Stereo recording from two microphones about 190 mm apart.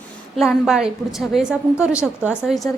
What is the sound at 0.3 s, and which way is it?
A woman's voice, centre (ahead or behind).